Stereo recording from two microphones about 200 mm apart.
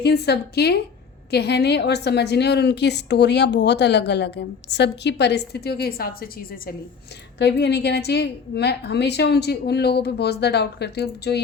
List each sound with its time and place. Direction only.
0.0 s a woman's voice: 55° left (ahead or behind)